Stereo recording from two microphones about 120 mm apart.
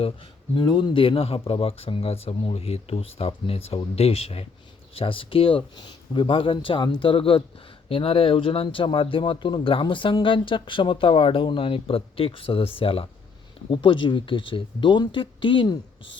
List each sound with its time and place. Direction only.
0.8 s speech: 50° left (ahead or behind)